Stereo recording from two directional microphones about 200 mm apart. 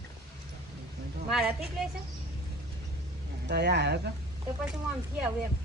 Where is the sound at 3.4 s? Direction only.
55° right (ahead or behind).